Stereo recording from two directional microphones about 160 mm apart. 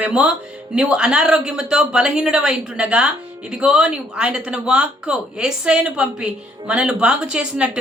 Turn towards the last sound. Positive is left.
turn(degrees=-5)  # may be behind; listen again after turning